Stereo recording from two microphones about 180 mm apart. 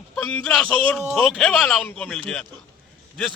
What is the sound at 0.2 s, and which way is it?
A man's voice, 5° left (ahead or behind).